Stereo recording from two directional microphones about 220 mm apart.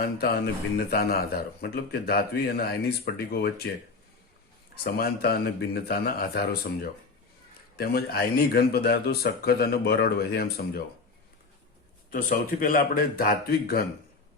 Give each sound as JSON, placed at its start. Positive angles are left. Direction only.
{"t": 0.0, "sound": "a man's voice", "side_deg": 45}
{"t": 4.7, "sound": "a man's voice", "side_deg": 45}
{"t": 12.1, "sound": "speech", "side_deg": 40}